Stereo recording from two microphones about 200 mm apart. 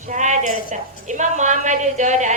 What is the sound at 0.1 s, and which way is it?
A woman's voice, 35° right (ahead or behind).